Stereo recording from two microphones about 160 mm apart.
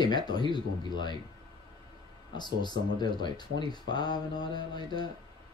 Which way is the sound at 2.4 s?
25° left (ahead or behind).